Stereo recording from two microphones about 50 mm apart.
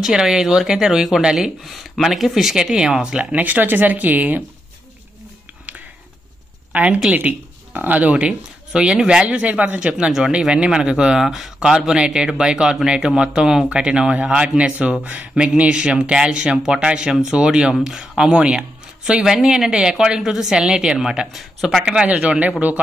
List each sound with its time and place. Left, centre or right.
0.0 s speech: centre
1.6 s speech: centre
2.5 s speech: centre
3.3 s speech: right
6.7 s a woman's voice: right
7.2 s speech: right; by 9.4 s centre
9.4 s speech: right; by 21.8 s centre
22.1 s speech: centre